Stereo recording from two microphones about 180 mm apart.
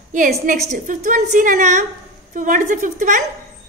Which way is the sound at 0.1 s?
45° right (ahead or behind).